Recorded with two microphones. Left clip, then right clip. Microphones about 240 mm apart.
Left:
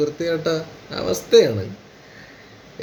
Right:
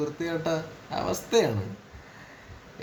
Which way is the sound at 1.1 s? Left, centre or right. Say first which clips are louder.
Left 11 dB; centre.